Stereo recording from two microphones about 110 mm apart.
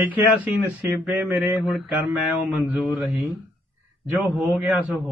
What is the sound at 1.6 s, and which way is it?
Speech, centre (ahead or behind).